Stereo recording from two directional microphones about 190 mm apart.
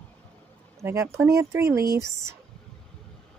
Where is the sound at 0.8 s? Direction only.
15° right (ahead or behind).